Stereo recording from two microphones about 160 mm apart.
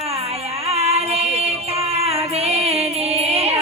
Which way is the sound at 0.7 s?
40° right (ahead or behind).